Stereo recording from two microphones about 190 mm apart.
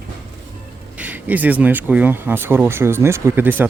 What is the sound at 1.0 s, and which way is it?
Speech, 10° right (ahead or behind).